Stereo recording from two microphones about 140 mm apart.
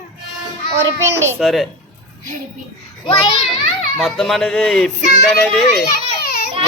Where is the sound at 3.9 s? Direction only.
5° left (ahead or behind).